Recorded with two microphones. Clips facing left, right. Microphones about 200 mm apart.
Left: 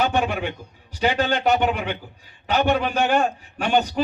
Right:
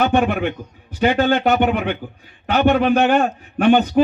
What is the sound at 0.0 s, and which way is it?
A man's voice, 55° right (ahead or behind).